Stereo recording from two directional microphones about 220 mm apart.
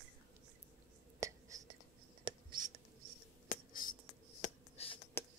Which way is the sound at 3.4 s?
40° left (ahead or behind).